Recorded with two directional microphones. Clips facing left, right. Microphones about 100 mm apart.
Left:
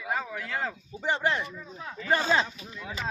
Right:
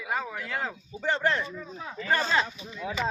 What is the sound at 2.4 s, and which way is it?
Speech, 25° right (ahead or behind).